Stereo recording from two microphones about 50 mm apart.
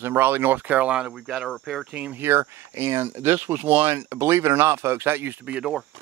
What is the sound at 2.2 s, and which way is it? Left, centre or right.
Speech, right.